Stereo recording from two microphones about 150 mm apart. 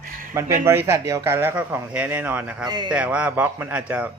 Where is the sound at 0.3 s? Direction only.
20° right (ahead or behind).